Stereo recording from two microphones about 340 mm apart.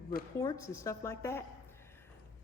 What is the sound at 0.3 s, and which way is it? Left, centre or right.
A woman's voice, centre.